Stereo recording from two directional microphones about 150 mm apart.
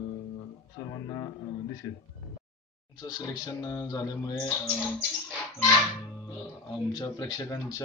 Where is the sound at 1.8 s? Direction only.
20° left (ahead or behind).